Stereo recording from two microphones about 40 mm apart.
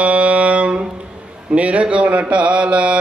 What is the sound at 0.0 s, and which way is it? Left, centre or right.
Music, right.